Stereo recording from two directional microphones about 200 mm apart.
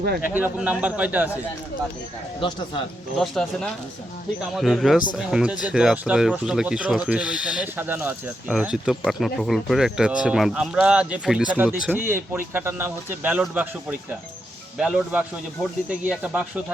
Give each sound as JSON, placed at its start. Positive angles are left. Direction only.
{"t": 0.3, "sound": "a man's voice", "side_deg": -10}
{"t": 2.4, "sound": "speech", "side_deg": 25}
{"t": 3.2, "sound": "speech", "side_deg": 5}
{"t": 14.8, "sound": "a man's voice", "side_deg": -5}